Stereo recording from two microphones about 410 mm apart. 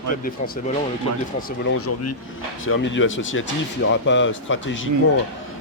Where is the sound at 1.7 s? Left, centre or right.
Left.